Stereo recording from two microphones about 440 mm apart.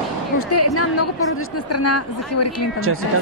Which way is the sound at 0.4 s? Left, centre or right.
Left.